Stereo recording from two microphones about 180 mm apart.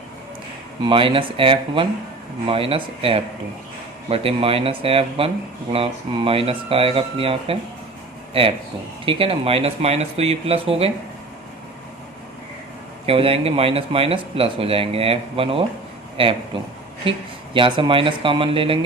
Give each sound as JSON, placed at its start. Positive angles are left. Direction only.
{"t": 0.8, "sound": "speech", "side_deg": -30}
{"t": 13.1, "sound": "speech", "side_deg": -30}
{"t": 17.0, "sound": "speech", "side_deg": -30}